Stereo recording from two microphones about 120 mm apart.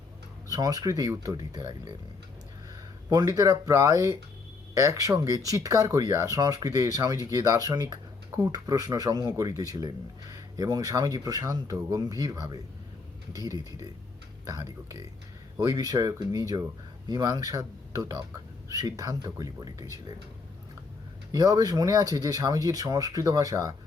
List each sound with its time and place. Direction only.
0.4 s speech: 30° right (ahead or behind)
3.1 s speech: 30° right (ahead or behind)
21.3 s speech: 30° right (ahead or behind)